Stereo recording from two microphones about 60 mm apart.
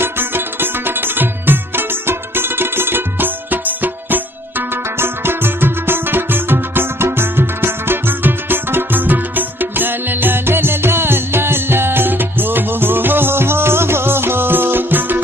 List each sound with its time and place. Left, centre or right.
0.0 s music: right